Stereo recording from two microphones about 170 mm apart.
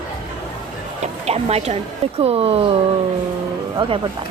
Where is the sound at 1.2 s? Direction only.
40° right (ahead or behind).